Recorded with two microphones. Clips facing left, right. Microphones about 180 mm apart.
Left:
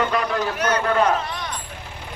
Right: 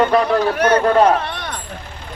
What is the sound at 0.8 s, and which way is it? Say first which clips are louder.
Speech: right 6 dB; 35° right (ahead or behind).